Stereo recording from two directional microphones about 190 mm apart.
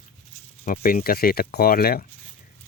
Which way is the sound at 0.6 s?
40° left (ahead or behind).